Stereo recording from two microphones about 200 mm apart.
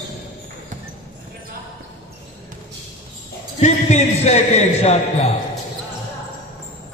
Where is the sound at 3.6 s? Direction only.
35° left (ahead or behind).